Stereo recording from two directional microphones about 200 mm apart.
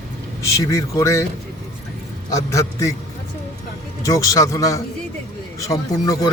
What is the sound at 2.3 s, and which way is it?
Speech, 15° left (ahead or behind).